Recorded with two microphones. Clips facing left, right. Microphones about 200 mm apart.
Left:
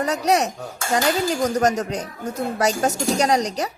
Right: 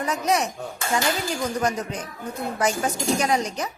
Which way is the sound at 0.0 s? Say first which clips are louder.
Left 4 dB; 40° left (ahead or behind).